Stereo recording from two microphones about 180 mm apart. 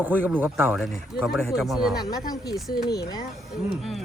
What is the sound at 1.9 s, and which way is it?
Speech, 20° left (ahead or behind).